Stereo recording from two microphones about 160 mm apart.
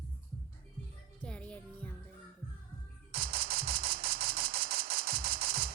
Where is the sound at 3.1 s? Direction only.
70° right (ahead or behind).